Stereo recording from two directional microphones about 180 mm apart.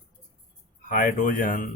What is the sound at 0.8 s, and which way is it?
Speech, 50° left (ahead or behind).